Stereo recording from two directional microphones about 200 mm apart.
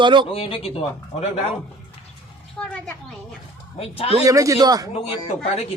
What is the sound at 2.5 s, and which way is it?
Speech, 5° left (ahead or behind).